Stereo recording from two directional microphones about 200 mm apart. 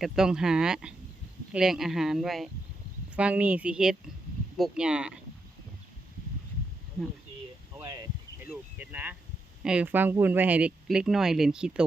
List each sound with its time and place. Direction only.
0.0 s speech: 5° right (ahead or behind)
7.8 s a sound: 20° right (ahead or behind)
8.8 s speech: 10° right (ahead or behind)